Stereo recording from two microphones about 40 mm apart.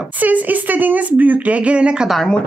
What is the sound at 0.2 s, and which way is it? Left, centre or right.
Speech, right.